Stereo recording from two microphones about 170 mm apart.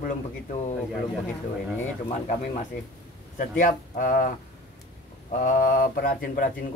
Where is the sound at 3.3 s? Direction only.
50° left (ahead or behind).